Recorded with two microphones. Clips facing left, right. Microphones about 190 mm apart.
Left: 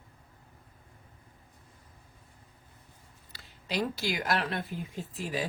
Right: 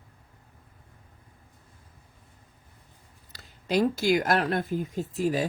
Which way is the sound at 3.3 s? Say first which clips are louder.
Right 8 dB; 45° right (ahead or behind).